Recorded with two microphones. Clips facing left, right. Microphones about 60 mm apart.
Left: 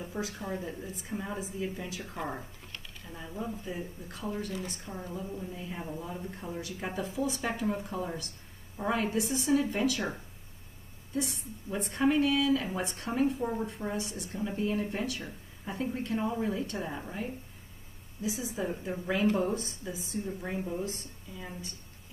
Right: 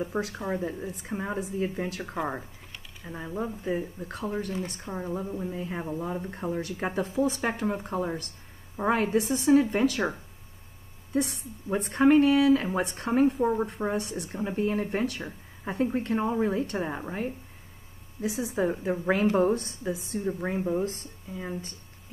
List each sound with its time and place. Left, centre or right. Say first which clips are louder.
0.0 s speech: right 6 dB; right
0.5 s speech: right 6 dB; right
3.0 s speech: right 6 dB; right
5.2 s speech: right 6 dB; right
11.7 s speech: right 7 dB; right